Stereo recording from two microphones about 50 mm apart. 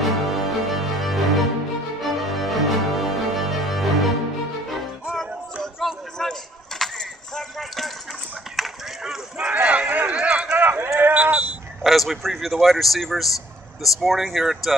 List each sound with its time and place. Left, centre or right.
0.0 s music: centre
5.1 s music: centre
6.2 s keys jangling: centre
6.8 s a sound: centre
8.6 s chop: centre
9.0 s run: centre
9.5 s run: right
10.6 s a sound: right
11.1 s sheep: right
11.8 s a sound: centre
12.5 s speech: centre